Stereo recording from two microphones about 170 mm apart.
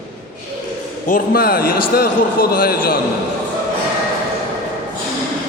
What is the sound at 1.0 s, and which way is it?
A man's voice, 60° left (ahead or behind).